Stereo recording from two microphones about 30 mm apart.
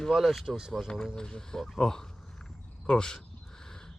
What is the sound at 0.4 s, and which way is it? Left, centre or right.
Speech, right.